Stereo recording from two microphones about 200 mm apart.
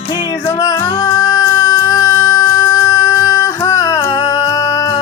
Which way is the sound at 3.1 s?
15° left (ahead or behind).